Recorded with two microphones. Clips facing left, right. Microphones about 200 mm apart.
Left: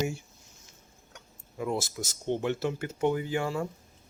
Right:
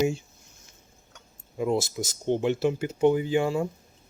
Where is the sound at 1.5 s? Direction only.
20° right (ahead or behind).